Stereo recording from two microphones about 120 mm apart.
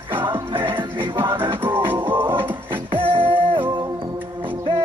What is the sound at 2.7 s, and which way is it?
Music, 50° right (ahead or behind).